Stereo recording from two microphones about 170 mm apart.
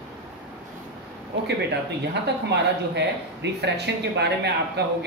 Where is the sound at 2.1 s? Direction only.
90° right.